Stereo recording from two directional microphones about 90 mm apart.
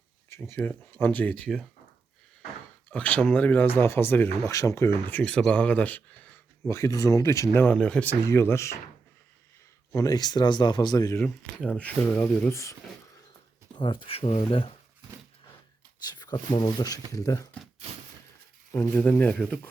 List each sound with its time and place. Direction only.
0.3 s speech: 30° left (ahead or behind)
2.9 s speech: 15° left (ahead or behind)
4.5 s speech: 35° left (ahead or behind); by 6.4 s 20° left (ahead or behind)
6.7 s speech: 40° left (ahead or behind)
7.8 s speech: 10° left (ahead or behind)
8.2 s speech: 30° left (ahead or behind)
9.9 s speech: 40° left (ahead or behind)
11.2 s speech: 15° left (ahead or behind)
12.5 s speech: 35° left (ahead or behind)
13.7 s speech: 65° left (ahead or behind); by 14.7 s 90° left
16.0 s speech: 50° left (ahead or behind)
17.1 s speech: 40° left (ahead or behind)
18.7 s speech: 20° left (ahead or behind)